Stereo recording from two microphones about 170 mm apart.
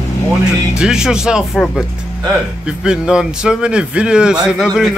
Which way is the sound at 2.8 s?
5° right (ahead or behind).